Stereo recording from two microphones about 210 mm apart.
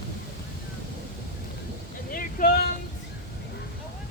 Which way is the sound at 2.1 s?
40° left (ahead or behind).